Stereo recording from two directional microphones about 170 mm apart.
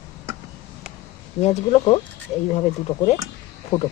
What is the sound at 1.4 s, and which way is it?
Speech, 40° left (ahead or behind).